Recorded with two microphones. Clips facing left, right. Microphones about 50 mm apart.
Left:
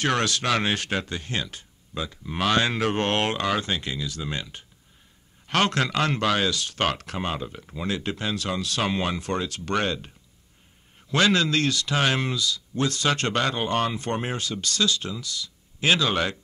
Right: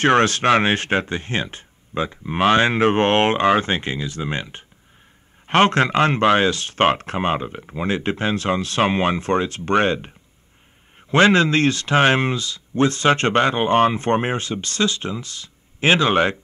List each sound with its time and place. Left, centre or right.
0.0 s speech: right